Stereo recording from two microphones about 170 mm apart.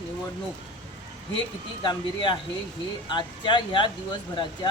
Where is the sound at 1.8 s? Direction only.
25° left (ahead or behind).